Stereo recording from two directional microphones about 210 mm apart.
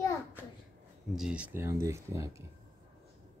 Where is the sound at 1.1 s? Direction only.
5° right (ahead or behind).